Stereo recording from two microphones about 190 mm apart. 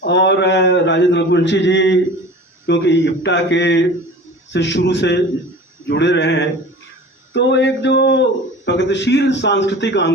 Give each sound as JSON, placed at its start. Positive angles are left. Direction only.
{"t": 0.0, "sound": "a man's voice", "side_deg": 65}